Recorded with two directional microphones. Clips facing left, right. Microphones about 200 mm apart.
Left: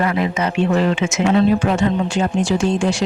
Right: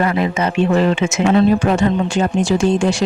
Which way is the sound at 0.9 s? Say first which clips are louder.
Right 2 dB; 45° right (ahead or behind).